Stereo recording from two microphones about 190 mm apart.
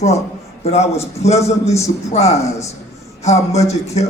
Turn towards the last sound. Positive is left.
turn(degrees=35)  # may be behind; listen again after turning